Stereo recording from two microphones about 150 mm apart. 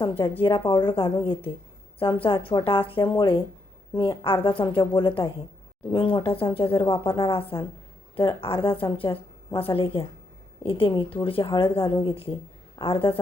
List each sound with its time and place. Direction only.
0.0 s speech: 35° left (ahead or behind)